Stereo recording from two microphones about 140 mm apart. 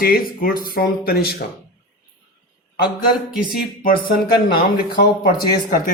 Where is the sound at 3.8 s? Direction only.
90° left.